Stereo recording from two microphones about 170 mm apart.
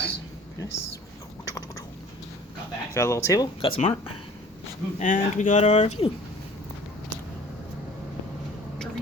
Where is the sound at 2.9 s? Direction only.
15° left (ahead or behind).